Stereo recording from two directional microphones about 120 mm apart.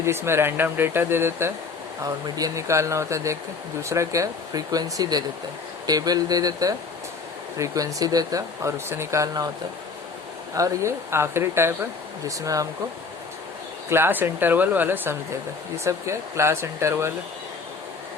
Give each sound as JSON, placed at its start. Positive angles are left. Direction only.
{"t": 0.0, "sound": "speech", "side_deg": -20}
{"t": 2.0, "sound": "speech", "side_deg": -30}
{"t": 10.5, "sound": "speech", "side_deg": -25}
{"t": 13.9, "sound": "speech", "side_deg": -20}